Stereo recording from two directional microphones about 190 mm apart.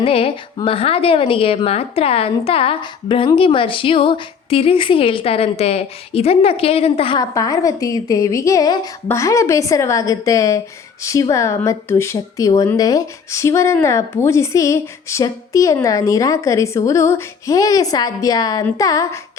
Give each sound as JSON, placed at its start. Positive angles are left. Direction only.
{"t": 0.0, "sound": "a woman's voice", "side_deg": 30}